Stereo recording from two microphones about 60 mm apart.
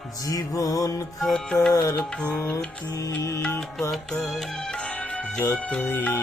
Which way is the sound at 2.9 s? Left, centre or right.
Left.